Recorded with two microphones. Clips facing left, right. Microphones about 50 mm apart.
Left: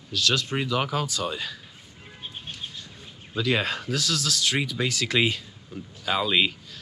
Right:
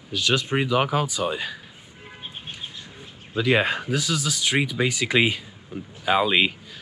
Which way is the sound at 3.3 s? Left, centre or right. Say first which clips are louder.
Right 4 dB; right.